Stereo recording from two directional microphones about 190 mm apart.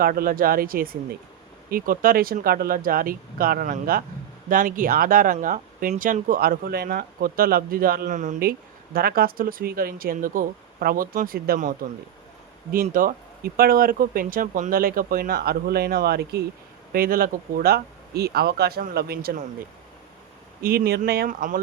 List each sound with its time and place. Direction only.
0.0 s speech: 50° right (ahead or behind)
12.9 s speech: 45° right (ahead or behind)
20.6 s speech: 50° right (ahead or behind)